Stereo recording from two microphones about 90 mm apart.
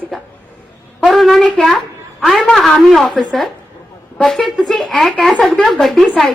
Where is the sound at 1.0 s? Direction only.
Centre (ahead or behind).